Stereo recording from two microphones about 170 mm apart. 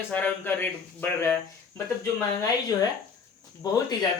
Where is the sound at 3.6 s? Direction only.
20° left (ahead or behind).